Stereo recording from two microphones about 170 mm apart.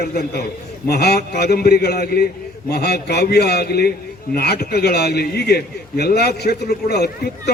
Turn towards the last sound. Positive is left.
turn(degrees=70)  # may be behind; listen again after turning